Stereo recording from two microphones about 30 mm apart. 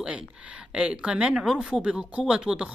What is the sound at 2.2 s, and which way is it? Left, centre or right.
Speech, right.